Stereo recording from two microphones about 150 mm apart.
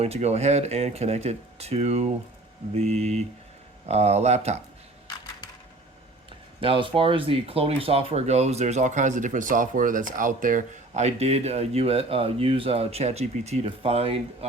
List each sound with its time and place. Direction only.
0.0 s speech: 45° right (ahead or behind)
6.6 s speech: 35° right (ahead or behind)